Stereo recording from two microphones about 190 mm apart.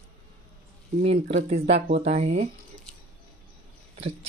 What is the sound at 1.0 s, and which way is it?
Speech, 35° right (ahead or behind).